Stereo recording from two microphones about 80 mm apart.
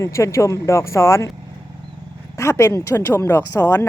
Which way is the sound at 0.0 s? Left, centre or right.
Left.